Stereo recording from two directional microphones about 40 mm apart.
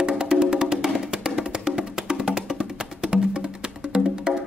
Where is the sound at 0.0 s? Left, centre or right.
Centre.